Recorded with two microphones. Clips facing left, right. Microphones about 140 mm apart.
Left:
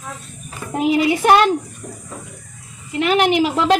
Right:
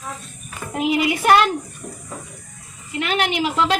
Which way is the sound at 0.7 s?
35° left (ahead or behind).